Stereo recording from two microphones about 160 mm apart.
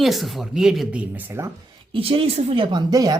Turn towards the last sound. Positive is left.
turn(degrees=-25)  # may be behind; listen again after turning